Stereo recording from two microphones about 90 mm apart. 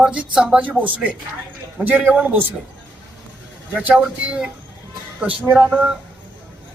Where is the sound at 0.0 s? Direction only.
10° right (ahead or behind).